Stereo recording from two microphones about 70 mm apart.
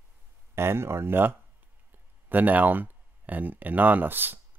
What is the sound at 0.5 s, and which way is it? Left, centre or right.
Speech, right.